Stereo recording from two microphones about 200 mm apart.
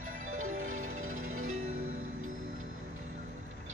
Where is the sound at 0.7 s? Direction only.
90° right.